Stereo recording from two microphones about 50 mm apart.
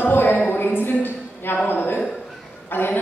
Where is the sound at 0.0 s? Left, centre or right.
Left.